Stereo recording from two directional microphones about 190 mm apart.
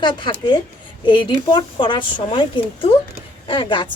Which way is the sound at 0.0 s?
25° left (ahead or behind).